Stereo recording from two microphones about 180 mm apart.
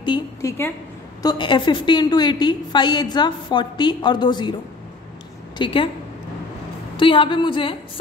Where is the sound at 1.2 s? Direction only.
25° left (ahead or behind).